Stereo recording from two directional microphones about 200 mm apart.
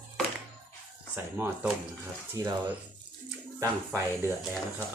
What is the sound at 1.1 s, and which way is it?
Speech, 10° right (ahead or behind).